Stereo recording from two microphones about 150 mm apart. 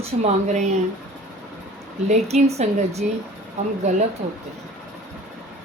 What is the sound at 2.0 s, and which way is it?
Speech, 45° right (ahead or behind).